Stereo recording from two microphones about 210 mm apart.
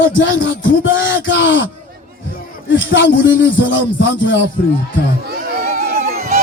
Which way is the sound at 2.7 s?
60° left (ahead or behind).